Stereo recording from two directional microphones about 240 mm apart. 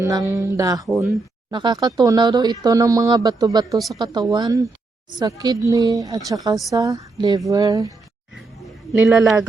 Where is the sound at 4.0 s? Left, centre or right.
Centre.